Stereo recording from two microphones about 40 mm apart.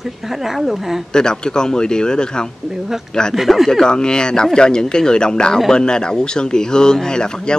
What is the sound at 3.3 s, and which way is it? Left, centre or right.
Speech, centre.